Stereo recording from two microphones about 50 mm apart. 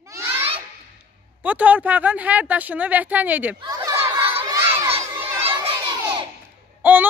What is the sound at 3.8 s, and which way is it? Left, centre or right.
Children playing, right.